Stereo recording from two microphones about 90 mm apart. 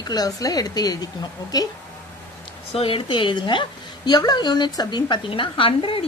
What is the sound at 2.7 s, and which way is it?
A woman's voice, 90° left.